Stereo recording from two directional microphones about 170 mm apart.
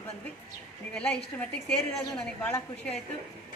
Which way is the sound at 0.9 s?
5° left (ahead or behind).